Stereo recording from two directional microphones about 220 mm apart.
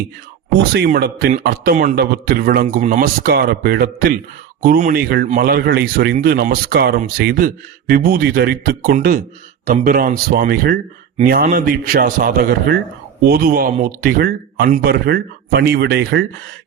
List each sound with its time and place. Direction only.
0.7 s a man's voice: 45° right (ahead or behind)